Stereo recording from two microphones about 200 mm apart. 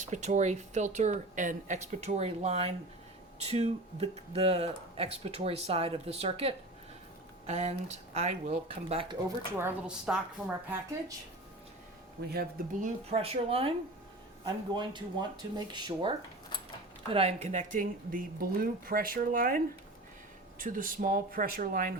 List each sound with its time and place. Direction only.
0.0 s speech: 35° right (ahead or behind)
9.6 s a woman's voice: 10° right (ahead or behind)
12.3 s speech: 50° right (ahead or behind)
13.1 s speech: 30° right (ahead or behind)